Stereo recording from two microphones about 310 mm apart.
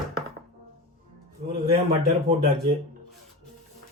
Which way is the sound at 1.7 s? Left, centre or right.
Right.